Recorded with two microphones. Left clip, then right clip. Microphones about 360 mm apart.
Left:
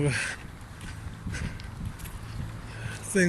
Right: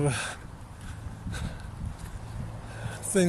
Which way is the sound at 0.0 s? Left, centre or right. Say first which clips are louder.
Left 1 dB; centre.